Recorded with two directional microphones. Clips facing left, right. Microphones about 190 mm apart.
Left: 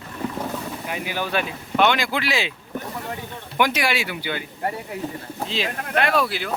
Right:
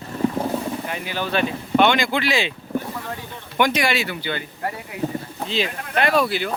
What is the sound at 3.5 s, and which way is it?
Speech, 5° left (ahead or behind).